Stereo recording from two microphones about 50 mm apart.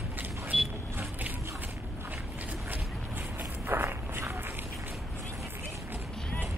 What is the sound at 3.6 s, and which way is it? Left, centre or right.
Walk, right.